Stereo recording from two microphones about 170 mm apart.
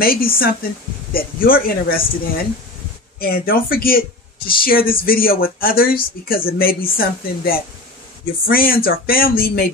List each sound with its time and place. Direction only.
0.0 s speech: 60° left (ahead or behind)